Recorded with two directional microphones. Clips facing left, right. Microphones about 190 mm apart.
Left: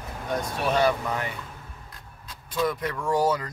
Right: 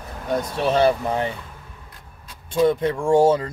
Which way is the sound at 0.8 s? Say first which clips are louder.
Right 6 dB; 30° right (ahead or behind).